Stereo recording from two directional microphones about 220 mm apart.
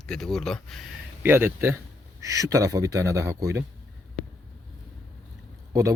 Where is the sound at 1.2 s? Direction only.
10° right (ahead or behind).